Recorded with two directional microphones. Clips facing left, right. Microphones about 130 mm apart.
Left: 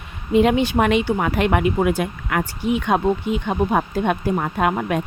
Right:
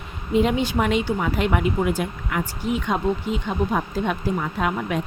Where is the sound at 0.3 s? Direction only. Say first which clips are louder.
Left 4 dB; 70° left (ahead or behind).